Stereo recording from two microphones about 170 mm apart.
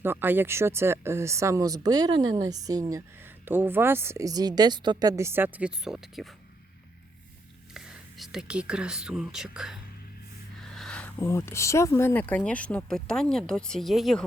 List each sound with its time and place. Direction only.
0.0 s speech: 10° right (ahead or behind)
7.7 s speech: 5° right (ahead or behind)
10.7 s a sound: 5° left (ahead or behind)
11.2 s speech: 15° left (ahead or behind); by 14.3 s centre (ahead or behind)